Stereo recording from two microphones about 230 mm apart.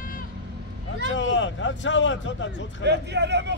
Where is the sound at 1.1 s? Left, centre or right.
Left.